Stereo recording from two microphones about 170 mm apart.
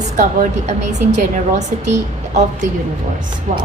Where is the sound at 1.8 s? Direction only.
45° right (ahead or behind).